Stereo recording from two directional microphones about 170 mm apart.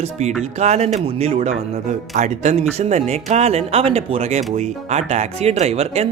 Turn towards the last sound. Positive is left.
turn(degrees=-40)  # may be behind; listen again after turning